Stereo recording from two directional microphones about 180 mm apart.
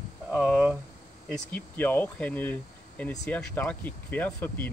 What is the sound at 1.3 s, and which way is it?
Speech, 10° left (ahead or behind).